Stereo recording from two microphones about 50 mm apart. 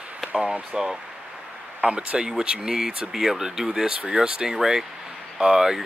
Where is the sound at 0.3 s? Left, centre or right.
Centre.